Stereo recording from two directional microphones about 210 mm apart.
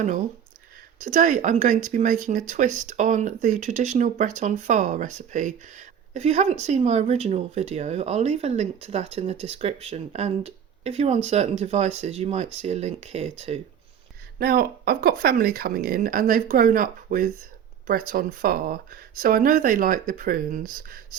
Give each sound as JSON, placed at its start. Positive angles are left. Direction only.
{"t": 0.0, "sound": "speech", "side_deg": -35}
{"t": 14.3, "sound": "speech", "side_deg": -45}